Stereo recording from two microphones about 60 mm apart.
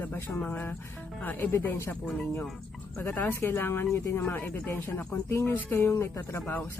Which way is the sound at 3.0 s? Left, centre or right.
Left.